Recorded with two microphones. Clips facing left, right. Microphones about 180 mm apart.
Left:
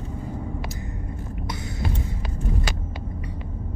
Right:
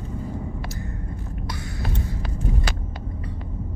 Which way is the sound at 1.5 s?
20° left (ahead or behind).